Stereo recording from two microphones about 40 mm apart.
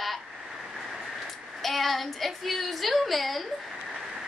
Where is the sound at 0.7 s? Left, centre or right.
Centre.